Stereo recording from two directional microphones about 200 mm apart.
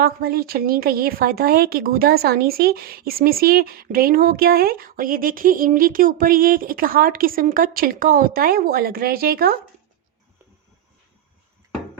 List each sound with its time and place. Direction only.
0.0 s a woman's voice: 50° right (ahead or behind)